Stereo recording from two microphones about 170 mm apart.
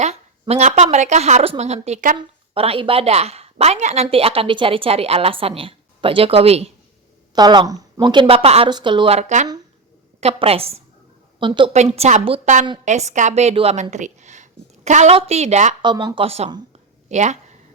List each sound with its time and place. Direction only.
0.0 s a woman's voice: 40° right (ahead or behind)
2.1 s a woman's voice: 30° right (ahead or behind)
7.3 s a woman's voice: 25° right (ahead or behind); by 15.7 s 40° right (ahead or behind)
15.8 s a woman's voice: 25° right (ahead or behind); by 17.3 s 45° right (ahead or behind)